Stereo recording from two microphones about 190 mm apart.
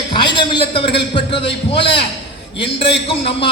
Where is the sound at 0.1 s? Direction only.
25° left (ahead or behind).